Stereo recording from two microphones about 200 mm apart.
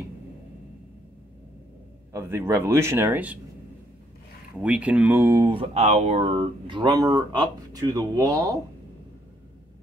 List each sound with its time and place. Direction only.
2.1 s speech: 10° right (ahead or behind)
4.6 s speech: 5° right (ahead or behind)
5.6 s speech: 30° right (ahead or behind)